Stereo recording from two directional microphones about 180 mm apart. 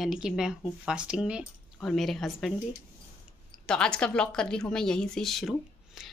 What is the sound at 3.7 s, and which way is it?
A woman's voice, 5° left (ahead or behind).